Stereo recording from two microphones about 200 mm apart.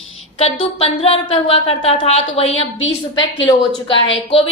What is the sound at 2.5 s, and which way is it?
Speech, 75° left (ahead or behind).